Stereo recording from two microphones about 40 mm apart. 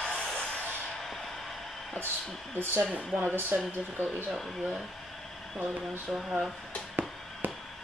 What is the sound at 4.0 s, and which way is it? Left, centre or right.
Speech, right.